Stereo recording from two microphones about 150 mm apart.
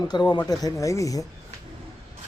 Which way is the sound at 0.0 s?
30° left (ahead or behind).